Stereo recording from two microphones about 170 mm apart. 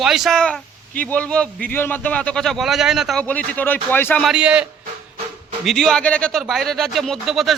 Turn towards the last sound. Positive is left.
turn(degrees=0)  # may be behind; listen again after turning